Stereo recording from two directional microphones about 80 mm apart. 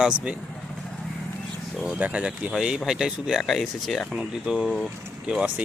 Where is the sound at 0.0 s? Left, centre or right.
Centre.